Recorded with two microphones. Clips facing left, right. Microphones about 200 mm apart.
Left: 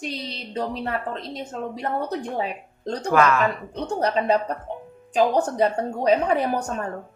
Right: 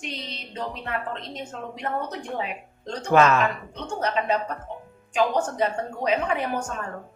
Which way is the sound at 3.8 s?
35° left (ahead or behind).